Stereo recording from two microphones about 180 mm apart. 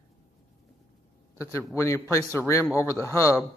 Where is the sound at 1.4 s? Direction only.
15° left (ahead or behind).